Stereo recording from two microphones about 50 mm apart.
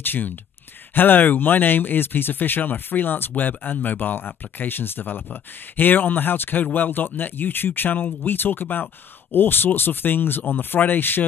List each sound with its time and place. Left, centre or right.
0.0 s speech: left